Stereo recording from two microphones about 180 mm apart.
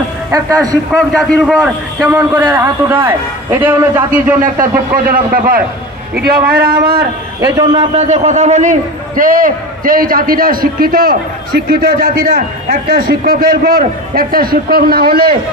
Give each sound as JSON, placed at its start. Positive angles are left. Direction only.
{"t": 0.3, "sound": "a man's voice", "side_deg": -20}
{"t": 1.1, "sound": "a man's voice", "side_deg": 0}
{"t": 4.4, "sound": "a man's voice", "side_deg": -50}
{"t": 7.4, "sound": "a man's voice", "side_deg": -20}
{"t": 7.9, "sound": "a man's voice", "side_deg": -40}